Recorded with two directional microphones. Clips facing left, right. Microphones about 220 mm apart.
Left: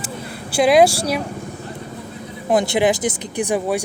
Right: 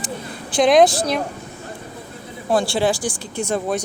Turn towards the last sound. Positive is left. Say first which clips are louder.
# left 2 dB
turn(degrees=10)  # may be behind; listen again after turning